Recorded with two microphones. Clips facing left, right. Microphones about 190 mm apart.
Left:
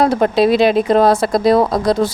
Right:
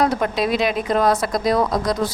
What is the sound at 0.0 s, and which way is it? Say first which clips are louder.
A woman's voice: left 7 dB; 30° left (ahead or behind).